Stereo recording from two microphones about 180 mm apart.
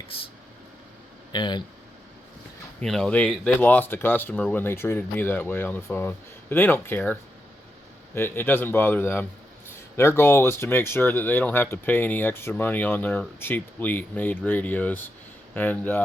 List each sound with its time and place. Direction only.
0.1 s speech: 30° left (ahead or behind)
1.3 s speech: 25° left (ahead or behind)
2.8 s speech: centre (ahead or behind)